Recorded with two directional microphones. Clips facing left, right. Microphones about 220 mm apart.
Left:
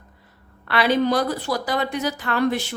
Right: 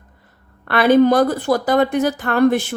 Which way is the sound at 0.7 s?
50° right (ahead or behind).